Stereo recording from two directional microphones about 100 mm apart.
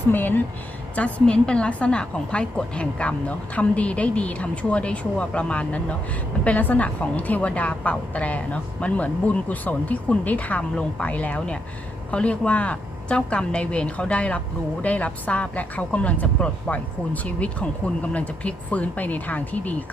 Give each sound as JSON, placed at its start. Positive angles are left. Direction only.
{"t": 0.1, "sound": "a woman's voice", "side_deg": 20}